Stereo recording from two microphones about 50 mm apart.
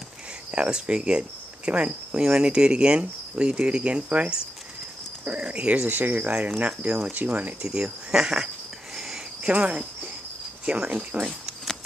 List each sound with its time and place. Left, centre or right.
0.5 s speech: centre
5.9 s speech: right
7.6 s speech: centre
8.9 s a sound: centre
9.5 s speech: right